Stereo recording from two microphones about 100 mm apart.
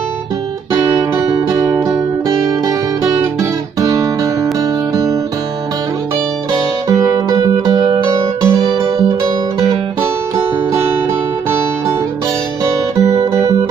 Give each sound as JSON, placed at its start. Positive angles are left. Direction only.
{"t": 1.3, "sound": "music", "side_deg": -35}
{"t": 6.9, "sound": "music", "side_deg": -35}
{"t": 13.2, "sound": "music", "side_deg": -30}